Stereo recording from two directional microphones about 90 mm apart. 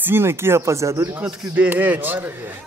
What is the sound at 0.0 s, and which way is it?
Speech, 25° right (ahead or behind).